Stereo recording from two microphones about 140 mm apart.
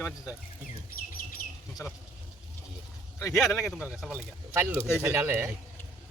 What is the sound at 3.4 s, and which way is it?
Speech, centre (ahead or behind).